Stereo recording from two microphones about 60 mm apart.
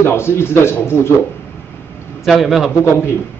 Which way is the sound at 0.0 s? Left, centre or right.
Left.